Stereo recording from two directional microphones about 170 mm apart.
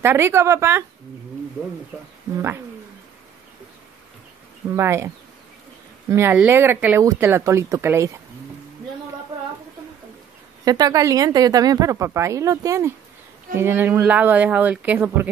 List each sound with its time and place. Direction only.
0.0 s speech: 15° right (ahead or behind)
2.3 s speech: 15° right (ahead or behind)
4.7 s speech: 15° right (ahead or behind)
10.6 s a woman's voice: 20° right (ahead or behind)